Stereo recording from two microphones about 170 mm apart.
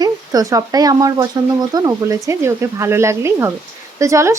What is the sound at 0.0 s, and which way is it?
Speech, 20° right (ahead or behind).